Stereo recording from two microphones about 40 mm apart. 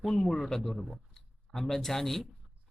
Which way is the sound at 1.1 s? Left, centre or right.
Centre.